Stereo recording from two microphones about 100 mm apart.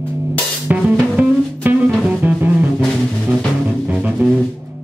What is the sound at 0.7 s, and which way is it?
Music, 15° right (ahead or behind).